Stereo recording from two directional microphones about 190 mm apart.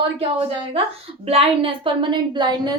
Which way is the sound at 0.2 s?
30° right (ahead or behind).